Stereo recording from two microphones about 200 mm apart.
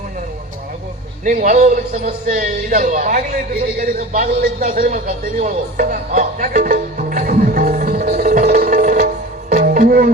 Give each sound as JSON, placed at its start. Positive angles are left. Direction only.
{"t": 1.2, "sound": "a man's voice", "side_deg": -40}
{"t": 9.5, "sound": "music", "side_deg": -40}